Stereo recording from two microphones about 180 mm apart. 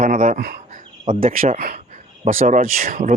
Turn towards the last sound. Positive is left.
turn(degrees=-50)  # may be behind; listen again after turning